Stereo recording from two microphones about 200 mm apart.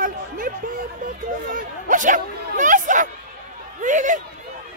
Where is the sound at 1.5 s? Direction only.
40° right (ahead or behind).